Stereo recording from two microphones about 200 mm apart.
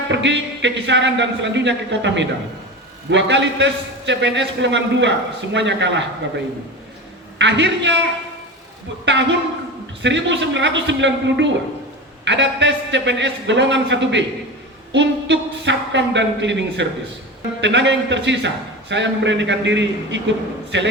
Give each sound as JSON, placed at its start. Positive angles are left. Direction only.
{"t": 0.1, "sound": "a man's voice", "side_deg": -65}
{"t": 7.3, "sound": "a man's voice", "side_deg": -65}
{"t": 9.0, "sound": "a man's voice", "side_deg": -65}